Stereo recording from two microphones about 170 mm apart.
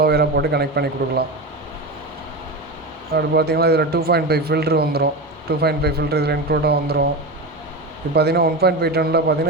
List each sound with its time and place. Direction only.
0.0 s a man's voice: 70° right (ahead or behind)
3.1 s speech: 70° right (ahead or behind)
8.1 s speech: 70° right (ahead or behind)